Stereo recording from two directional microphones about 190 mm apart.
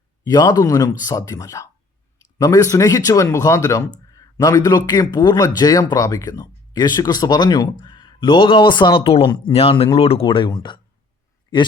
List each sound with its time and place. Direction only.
0.3 s speech: 20° left (ahead or behind)